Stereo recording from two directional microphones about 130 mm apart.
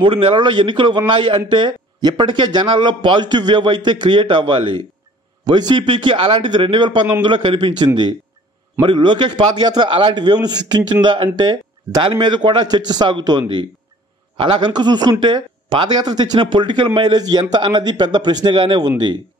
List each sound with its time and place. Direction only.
0.0 s speech: 45° right (ahead or behind)